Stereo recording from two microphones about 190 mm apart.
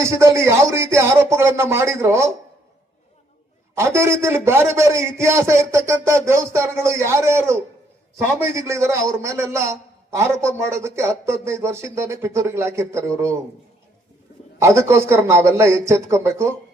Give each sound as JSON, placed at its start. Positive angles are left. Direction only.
{"t": 0.0, "sound": "a man's voice", "side_deg": -15}
{"t": 3.8, "sound": "a man's voice", "side_deg": -15}
{"t": 14.6, "sound": "a man's voice", "side_deg": -15}